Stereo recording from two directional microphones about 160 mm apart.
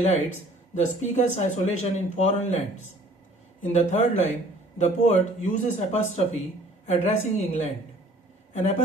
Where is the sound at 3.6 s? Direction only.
45° left (ahead or behind).